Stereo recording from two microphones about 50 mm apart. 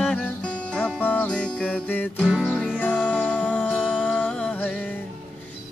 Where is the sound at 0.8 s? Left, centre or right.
Left.